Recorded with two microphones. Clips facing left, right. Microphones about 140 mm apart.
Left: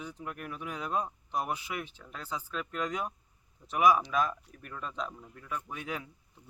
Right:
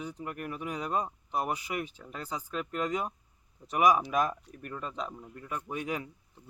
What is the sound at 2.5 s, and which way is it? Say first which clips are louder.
A man's voice: right 3 dB; 5° right (ahead or behind).